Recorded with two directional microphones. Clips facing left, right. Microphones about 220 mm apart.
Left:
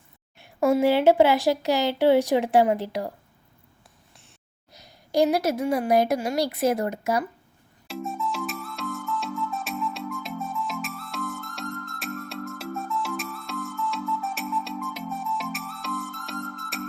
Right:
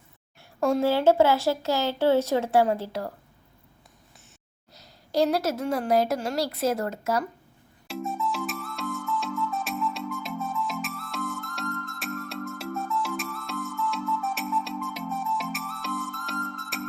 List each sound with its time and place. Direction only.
0.8 s a woman's voice: 15° left (ahead or behind)
4.7 s a woman's voice: 15° left (ahead or behind)
7.9 s music: centre (ahead or behind)